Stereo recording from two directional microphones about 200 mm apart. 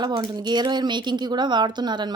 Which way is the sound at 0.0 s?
20° right (ahead or behind).